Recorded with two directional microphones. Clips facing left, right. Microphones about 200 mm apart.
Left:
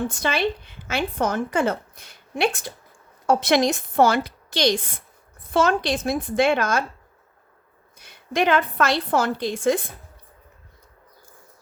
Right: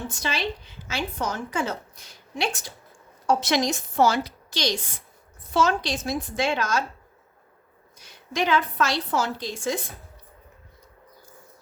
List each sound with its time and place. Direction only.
0.1 s a woman's voice: 55° left (ahead or behind)
7.9 s a woman's voice: 55° left (ahead or behind)